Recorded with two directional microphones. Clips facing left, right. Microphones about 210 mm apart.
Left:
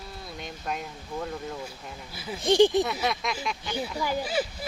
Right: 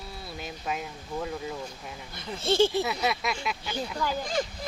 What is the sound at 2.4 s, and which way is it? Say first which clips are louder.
Speech: left 4 dB; 15° left (ahead or behind).